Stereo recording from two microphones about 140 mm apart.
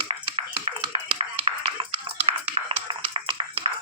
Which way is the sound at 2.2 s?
40° right (ahead or behind).